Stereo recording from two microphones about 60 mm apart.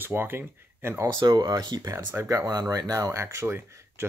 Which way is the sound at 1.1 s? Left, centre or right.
Right.